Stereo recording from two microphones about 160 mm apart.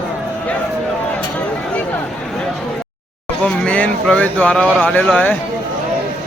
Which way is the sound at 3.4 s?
5° left (ahead or behind).